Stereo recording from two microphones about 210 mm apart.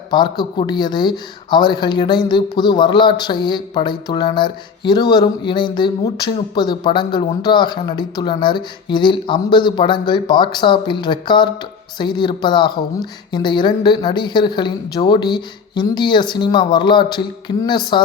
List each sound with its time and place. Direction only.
0.1 s speech: 20° left (ahead or behind)